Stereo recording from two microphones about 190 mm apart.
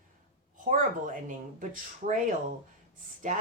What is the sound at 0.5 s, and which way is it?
Speech, 45° right (ahead or behind).